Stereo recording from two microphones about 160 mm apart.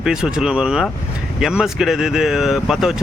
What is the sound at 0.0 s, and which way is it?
Speech, 5° right (ahead or behind).